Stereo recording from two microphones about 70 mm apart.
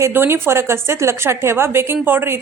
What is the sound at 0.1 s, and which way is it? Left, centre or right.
A woman's voice, right.